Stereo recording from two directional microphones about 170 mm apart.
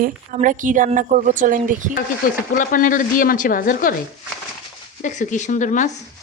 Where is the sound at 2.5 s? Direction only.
50° left (ahead or behind).